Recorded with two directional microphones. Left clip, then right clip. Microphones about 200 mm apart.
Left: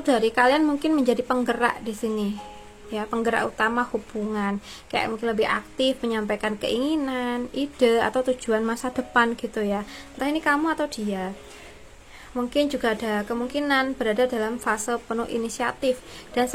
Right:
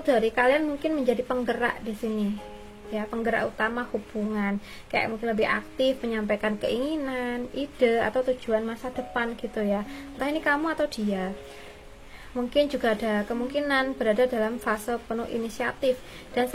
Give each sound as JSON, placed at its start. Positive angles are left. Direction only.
{"t": 0.0, "sound": "a woman's voice", "side_deg": 10}
{"t": 12.4, "sound": "a woman's voice", "side_deg": 0}